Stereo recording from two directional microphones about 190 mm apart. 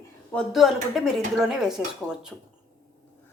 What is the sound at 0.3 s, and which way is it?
A woman's voice, centre (ahead or behind).